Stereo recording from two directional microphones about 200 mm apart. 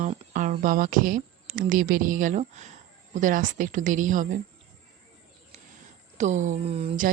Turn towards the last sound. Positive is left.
turn(degrees=-30)  # may be behind; listen again after turning